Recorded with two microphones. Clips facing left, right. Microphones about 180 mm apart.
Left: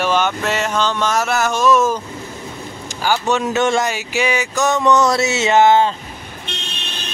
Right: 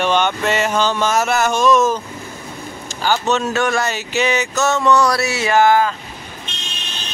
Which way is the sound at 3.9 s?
10° left (ahead or behind).